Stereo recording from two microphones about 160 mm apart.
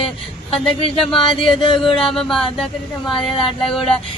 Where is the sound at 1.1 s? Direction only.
30° left (ahead or behind).